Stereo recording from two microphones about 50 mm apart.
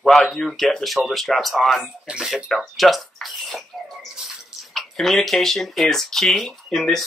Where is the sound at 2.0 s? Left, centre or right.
Centre.